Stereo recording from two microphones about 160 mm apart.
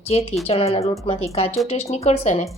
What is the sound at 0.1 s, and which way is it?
A woman's voice, 40° left (ahead or behind).